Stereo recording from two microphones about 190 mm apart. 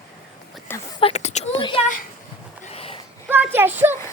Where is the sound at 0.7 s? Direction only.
10° left (ahead or behind).